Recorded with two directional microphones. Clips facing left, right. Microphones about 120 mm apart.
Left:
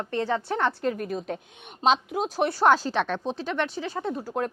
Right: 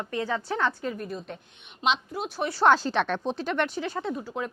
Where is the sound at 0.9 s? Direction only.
65° left (ahead or behind).